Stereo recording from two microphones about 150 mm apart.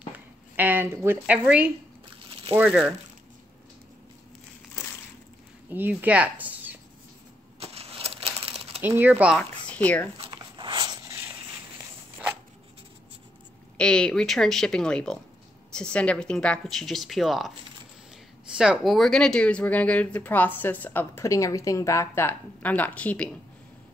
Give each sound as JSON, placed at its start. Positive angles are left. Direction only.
{"t": 0.1, "sound": "speech", "side_deg": -10}
{"t": 5.7, "sound": "speech", "side_deg": -10}
{"t": 7.6, "sound": "a sound", "side_deg": -40}
{"t": 8.4, "sound": "crumpling", "side_deg": -40}
{"t": 8.8, "sound": "speech", "side_deg": -15}
{"t": 9.4, "sound": "speech", "side_deg": 10}
{"t": 10.1, "sound": "a sound", "side_deg": -35}
{"t": 13.7, "sound": "speech", "side_deg": 5}
{"t": 18.5, "sound": "speech", "side_deg": -5}